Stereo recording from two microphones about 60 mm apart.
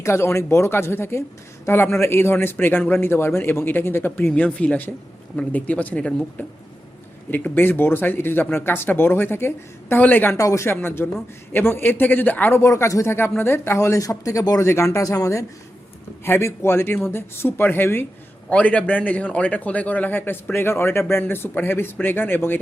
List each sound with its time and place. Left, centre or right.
0.0 s a man's voice: left
4.3 s a man's voice: left
7.3 s a man's voice: left
10.3 s a man's voice: left
10.8 s a man's voice: left
12.5 s speech: left
13.7 s a man's voice: left
14.7 s speech: left
16.2 s a man's voice: left
18.4 s a man's voice: left